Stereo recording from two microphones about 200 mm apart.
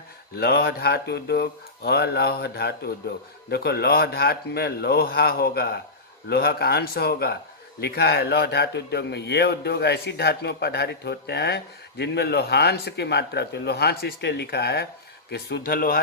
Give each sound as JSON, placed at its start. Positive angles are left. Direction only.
{"t": 0.3, "sound": "a man's voice", "side_deg": 50}